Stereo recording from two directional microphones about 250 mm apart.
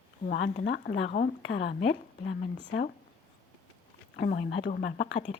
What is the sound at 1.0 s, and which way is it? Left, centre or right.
Speech, left.